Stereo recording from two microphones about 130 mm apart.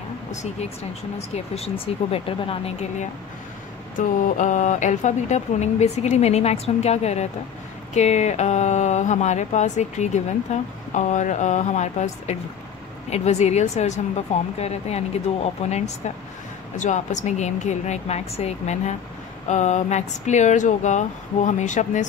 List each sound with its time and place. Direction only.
0.3 s speech: 65° left (ahead or behind)
1.3 s speech: 50° left (ahead or behind)
4.0 s speech: 70° left (ahead or behind); by 15.8 s 55° left (ahead or behind)
16.7 s speech: 75° left (ahead or behind)